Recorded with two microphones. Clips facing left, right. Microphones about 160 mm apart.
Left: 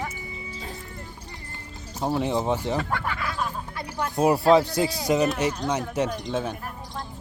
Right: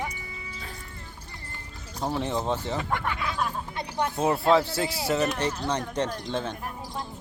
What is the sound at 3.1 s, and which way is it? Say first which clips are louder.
Snicker: even; 20° right (ahead or behind).